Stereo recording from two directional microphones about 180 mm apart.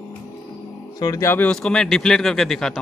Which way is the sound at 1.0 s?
15° left (ahead or behind).